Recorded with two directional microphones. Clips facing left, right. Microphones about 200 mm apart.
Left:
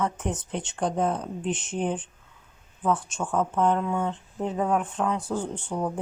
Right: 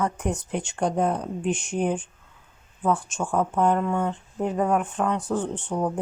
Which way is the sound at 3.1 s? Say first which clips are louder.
Right 2 dB; 10° right (ahead or behind).